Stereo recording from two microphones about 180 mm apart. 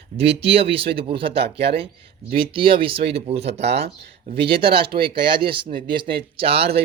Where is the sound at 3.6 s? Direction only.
70° right (ahead or behind).